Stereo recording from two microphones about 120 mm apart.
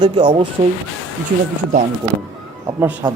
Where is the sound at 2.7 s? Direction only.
15° right (ahead or behind).